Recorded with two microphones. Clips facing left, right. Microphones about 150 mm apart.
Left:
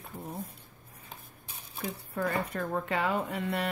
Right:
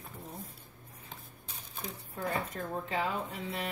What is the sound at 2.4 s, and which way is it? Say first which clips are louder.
A woman's voice: left 5 dB; 70° left (ahead or behind).